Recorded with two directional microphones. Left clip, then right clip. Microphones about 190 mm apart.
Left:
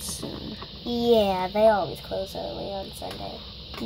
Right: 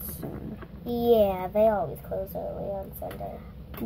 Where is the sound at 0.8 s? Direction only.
40° left (ahead or behind).